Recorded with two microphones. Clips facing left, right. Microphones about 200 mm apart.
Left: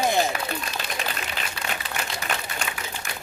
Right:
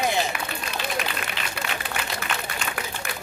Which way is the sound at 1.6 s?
55° right (ahead or behind).